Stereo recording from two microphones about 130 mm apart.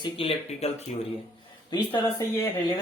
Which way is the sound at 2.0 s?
25° left (ahead or behind).